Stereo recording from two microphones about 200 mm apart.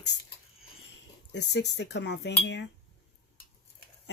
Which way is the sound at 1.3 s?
60° left (ahead or behind).